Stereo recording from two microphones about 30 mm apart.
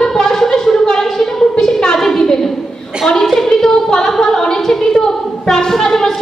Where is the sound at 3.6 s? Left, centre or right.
Centre.